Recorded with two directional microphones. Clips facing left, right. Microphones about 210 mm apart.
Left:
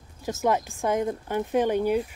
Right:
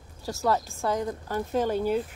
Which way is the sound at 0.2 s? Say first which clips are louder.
Left 2 dB; 20° left (ahead or behind).